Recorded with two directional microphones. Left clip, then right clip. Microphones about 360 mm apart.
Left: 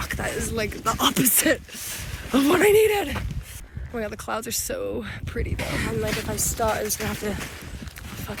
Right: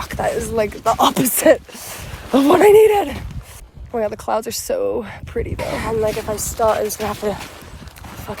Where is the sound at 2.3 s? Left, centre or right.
Right.